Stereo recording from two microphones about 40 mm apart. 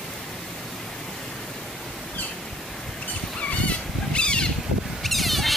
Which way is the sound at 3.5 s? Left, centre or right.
Left.